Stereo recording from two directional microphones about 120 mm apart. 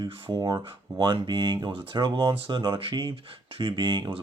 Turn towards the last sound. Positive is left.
turn(degrees=-40)  # may be behind; listen again after turning